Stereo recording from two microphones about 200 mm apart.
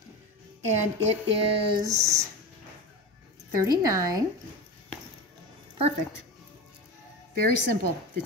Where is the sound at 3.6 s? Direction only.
15° right (ahead or behind).